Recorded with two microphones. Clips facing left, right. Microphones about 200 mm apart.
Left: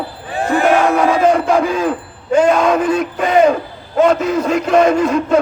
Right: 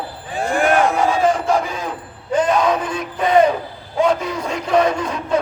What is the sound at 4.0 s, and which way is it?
Speech, 70° left (ahead or behind).